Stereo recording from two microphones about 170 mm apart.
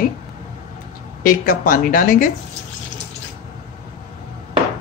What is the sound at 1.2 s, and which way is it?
Speech, 55° left (ahead or behind).